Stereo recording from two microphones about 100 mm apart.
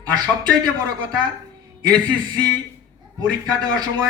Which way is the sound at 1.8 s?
45° right (ahead or behind).